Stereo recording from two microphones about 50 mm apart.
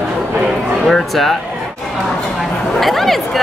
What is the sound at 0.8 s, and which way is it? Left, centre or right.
Speech, centre.